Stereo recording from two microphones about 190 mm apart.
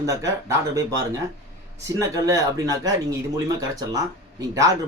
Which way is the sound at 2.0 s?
15° right (ahead or behind).